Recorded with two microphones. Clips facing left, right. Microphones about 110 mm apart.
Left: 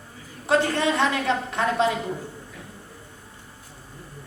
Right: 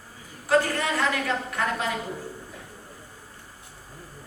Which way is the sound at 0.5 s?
25° left (ahead or behind).